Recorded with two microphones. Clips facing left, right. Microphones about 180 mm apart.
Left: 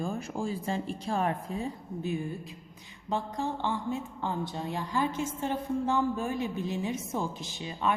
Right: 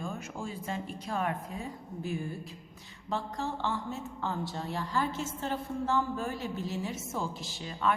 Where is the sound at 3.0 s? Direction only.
15° left (ahead or behind).